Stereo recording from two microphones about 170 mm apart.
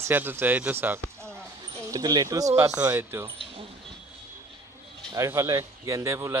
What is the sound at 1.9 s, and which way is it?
Speech, 20° right (ahead or behind).